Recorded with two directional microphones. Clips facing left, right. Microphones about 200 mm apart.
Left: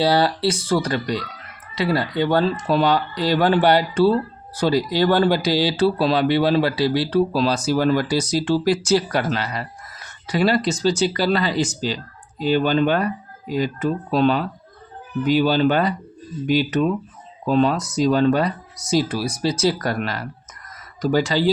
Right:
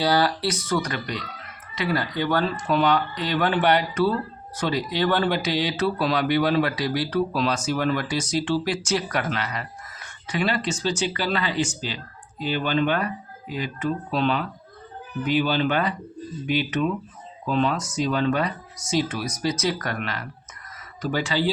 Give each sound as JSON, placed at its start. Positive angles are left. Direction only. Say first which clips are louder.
{"t": 0.0, "sound": "speech", "louder": "left 4 dB", "side_deg": 25}